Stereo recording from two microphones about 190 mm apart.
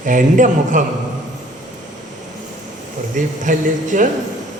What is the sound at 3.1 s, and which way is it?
Speech, 40° right (ahead or behind).